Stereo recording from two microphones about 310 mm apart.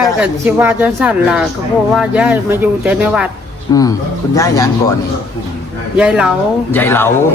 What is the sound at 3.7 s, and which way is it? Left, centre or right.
Speech, centre.